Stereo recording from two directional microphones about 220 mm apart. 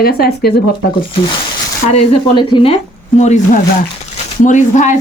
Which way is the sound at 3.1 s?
30° left (ahead or behind).